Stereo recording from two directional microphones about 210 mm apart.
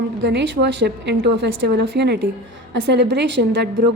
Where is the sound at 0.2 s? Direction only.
60° right (ahead or behind).